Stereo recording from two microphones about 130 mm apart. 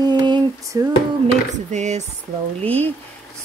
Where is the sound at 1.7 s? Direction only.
65° right (ahead or behind).